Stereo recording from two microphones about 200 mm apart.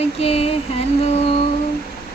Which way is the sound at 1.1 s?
30° left (ahead or behind).